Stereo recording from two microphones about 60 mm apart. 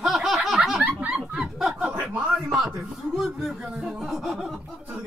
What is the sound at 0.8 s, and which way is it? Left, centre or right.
Snicker, right.